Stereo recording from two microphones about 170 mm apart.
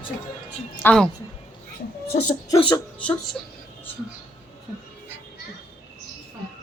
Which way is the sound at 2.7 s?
10° left (ahead or behind).